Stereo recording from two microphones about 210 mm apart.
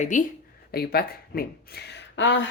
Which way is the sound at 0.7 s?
50° left (ahead or behind).